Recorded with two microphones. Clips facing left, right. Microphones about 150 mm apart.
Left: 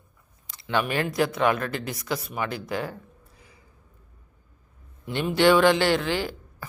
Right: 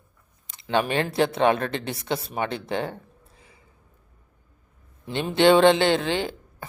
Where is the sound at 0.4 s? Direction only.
20° right (ahead or behind).